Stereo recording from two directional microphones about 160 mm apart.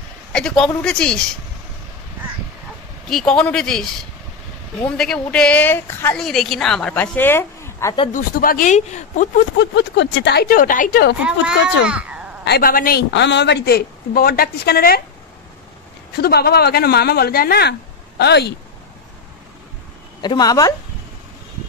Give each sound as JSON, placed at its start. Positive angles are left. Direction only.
{"t": 0.3, "sound": "a woman's voice", "side_deg": 5}
{"t": 3.1, "sound": "a woman's voice", "side_deg": 5}
{"t": 6.1, "sound": "a woman's voice", "side_deg": 0}
{"t": 8.1, "sound": "speech", "side_deg": 60}
{"t": 9.6, "sound": "speech", "side_deg": 90}
{"t": 11.2, "sound": "a child's voice", "side_deg": -5}
{"t": 12.4, "sound": "speech", "side_deg": 75}
{"t": 16.2, "sound": "speech", "side_deg": 80}
{"t": 20.2, "sound": "a woman's voice", "side_deg": 25}